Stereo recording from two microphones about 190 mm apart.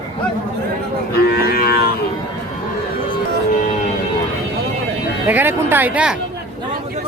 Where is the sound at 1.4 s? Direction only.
55° left (ahead or behind).